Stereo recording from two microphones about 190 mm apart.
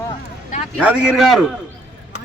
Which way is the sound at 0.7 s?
5° right (ahead or behind).